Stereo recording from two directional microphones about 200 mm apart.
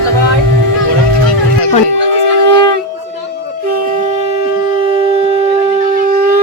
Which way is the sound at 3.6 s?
40° right (ahead or behind).